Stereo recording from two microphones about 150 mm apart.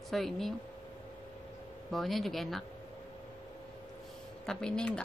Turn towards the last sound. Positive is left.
turn(degrees=5)  # may be behind; listen again after turning